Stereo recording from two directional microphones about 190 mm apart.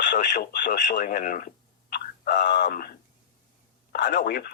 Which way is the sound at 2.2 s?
50° left (ahead or behind).